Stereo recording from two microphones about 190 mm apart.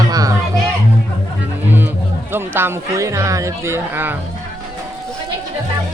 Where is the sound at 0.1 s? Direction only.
20° right (ahead or behind).